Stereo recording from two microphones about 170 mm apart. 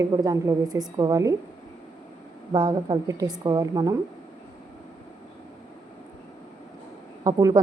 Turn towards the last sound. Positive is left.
turn(degrees=-20)  # may be behind; listen again after turning